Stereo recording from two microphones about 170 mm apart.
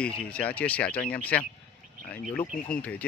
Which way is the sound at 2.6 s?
5° left (ahead or behind).